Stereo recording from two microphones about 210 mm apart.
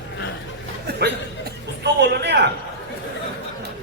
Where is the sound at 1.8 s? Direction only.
55° right (ahead or behind).